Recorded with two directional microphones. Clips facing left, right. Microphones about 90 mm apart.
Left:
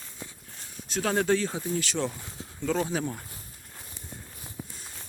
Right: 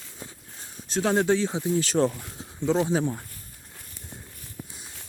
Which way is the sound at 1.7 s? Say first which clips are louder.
Right 8 dB; 35° right (ahead or behind).